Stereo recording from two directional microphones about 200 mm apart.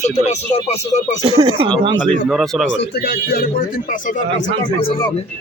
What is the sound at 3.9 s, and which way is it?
Speech, 35° left (ahead or behind).